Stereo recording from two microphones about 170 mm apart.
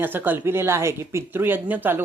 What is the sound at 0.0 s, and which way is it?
Speech, 10° right (ahead or behind).